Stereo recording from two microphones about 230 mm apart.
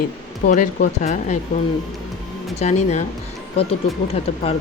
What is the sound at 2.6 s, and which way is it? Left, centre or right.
A woman's voice, left.